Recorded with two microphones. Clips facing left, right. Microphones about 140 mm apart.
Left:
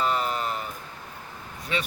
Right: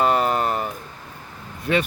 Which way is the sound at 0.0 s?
50° right (ahead or behind).